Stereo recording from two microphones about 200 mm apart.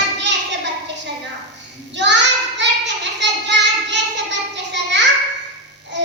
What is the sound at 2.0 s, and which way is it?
Child singing, 60° right (ahead or behind).